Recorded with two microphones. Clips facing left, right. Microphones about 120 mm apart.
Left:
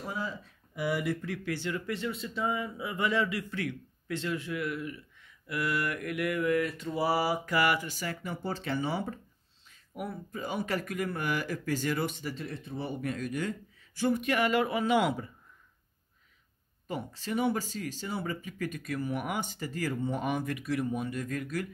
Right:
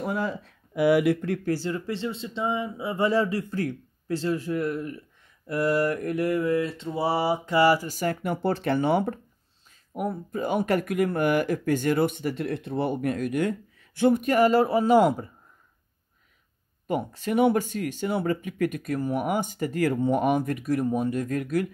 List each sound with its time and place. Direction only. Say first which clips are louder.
0.0 s speech: right 8 dB; 65° right (ahead or behind)
1.3 s speech: right 7 dB; 40° right (ahead or behind)
8.2 s speech: right 9 dB; 65° right (ahead or behind)
9.9 s speech: right 8 dB; 45° right (ahead or behind)
14.2 s speech: right 7 dB; 40° right (ahead or behind)
16.8 s speech: right 9 dB; 55° right (ahead or behind)